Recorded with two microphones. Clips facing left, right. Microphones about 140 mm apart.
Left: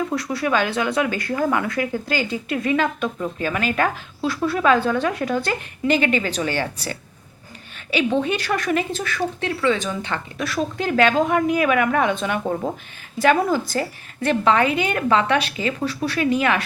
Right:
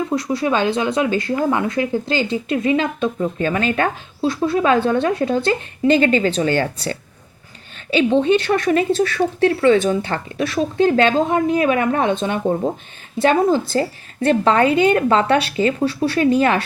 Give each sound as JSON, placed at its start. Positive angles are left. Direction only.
{"t": 0.1, "sound": "speech", "side_deg": -20}
{"t": 7.9, "sound": "a woman's voice", "side_deg": -30}